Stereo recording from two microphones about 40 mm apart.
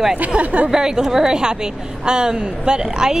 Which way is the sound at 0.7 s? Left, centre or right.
Centre.